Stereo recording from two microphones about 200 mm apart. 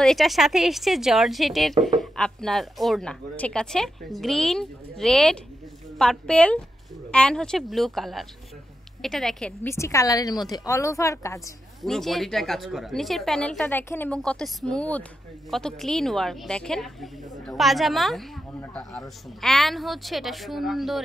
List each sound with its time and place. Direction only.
0.0 s a woman's voice: centre (ahead or behind)
11.8 s speech: centre (ahead or behind)